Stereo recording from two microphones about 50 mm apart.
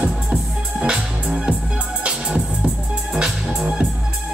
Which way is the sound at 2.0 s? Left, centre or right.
Right.